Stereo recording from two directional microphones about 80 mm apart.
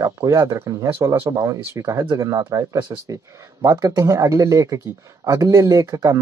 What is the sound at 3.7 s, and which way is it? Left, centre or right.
Speech, right.